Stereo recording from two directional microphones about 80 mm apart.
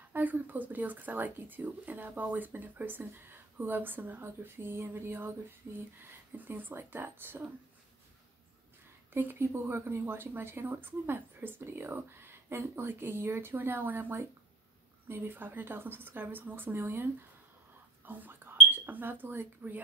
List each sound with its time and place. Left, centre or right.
0.1 s speech: right
6.3 s speech: right
9.1 s speech: right
18.0 s whispering: right
18.7 s speech: right